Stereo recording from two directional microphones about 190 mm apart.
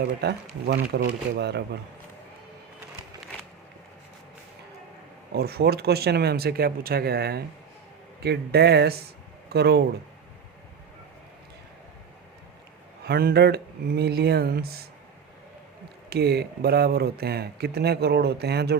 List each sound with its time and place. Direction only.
0.0 s speech: 60° right (ahead or behind)
5.3 s speech: 55° right (ahead or behind)
13.1 s speech: 55° right (ahead or behind)
16.0 s speech: 55° right (ahead or behind)